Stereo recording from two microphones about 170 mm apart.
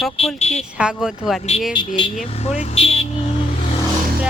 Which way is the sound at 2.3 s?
40° left (ahead or behind).